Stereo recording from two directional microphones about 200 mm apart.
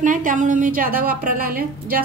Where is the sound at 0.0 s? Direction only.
40° right (ahead or behind).